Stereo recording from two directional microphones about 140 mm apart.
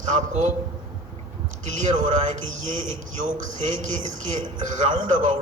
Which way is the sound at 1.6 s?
60° right (ahead or behind).